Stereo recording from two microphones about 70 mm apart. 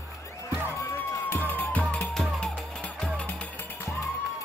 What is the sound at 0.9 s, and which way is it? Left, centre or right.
Music, left.